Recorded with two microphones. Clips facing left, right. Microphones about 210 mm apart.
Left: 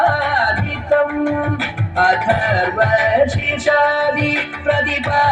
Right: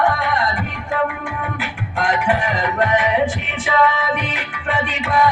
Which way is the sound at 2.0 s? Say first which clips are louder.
Left 2 dB; 40° left (ahead or behind).